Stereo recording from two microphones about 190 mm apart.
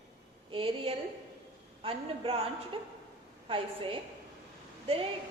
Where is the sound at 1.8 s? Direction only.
30° right (ahead or behind).